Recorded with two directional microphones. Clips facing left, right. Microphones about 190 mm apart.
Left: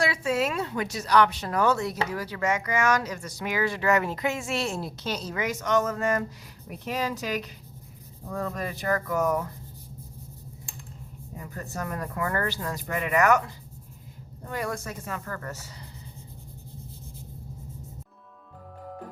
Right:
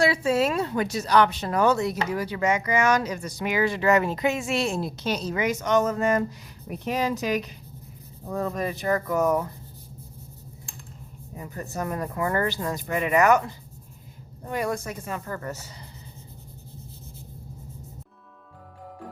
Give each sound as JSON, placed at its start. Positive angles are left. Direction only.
{"t": 0.0, "sound": "speech", "side_deg": -30}
{"t": 11.5, "sound": "speech", "side_deg": -20}
{"t": 14.5, "sound": "speech", "side_deg": -20}